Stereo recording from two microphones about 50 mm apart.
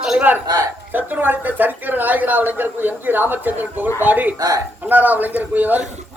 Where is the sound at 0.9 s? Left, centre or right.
Right.